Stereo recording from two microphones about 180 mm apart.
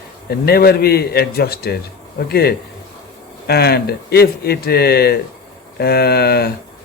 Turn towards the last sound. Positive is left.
turn(degrees=60)  # may be behind; listen again after turning